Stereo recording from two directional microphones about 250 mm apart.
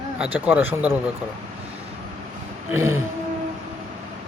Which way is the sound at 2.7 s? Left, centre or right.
Centre.